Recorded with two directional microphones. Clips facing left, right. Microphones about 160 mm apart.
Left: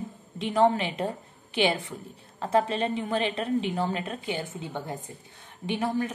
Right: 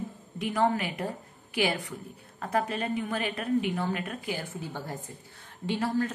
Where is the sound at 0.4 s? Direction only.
25° left (ahead or behind).